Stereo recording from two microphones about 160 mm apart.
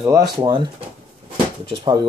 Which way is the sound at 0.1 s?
25° right (ahead or behind).